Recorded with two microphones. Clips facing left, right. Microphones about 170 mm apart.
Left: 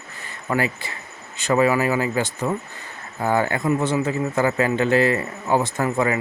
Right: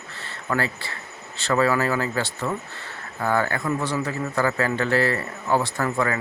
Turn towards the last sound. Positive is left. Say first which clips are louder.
# left 3 dB
turn(degrees=20)  # may be behind; listen again after turning